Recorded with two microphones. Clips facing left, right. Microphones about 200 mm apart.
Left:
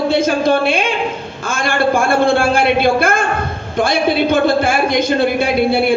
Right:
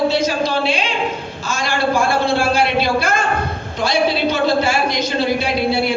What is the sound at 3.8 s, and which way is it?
Speech, 50° left (ahead or behind).